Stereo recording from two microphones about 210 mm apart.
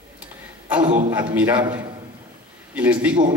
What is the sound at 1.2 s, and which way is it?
Speech, 10° right (ahead or behind).